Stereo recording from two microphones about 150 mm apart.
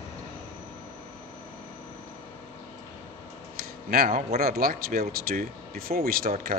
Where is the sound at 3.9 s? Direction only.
80° right.